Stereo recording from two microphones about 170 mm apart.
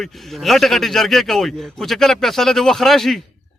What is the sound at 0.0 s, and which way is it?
A man's voice, centre (ahead or behind).